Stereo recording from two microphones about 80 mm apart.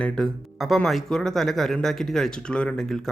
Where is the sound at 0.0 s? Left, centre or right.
Centre.